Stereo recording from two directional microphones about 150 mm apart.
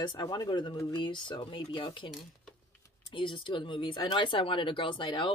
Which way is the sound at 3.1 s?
35° left (ahead or behind).